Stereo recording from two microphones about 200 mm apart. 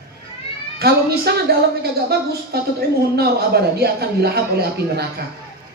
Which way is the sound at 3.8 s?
50° right (ahead or behind).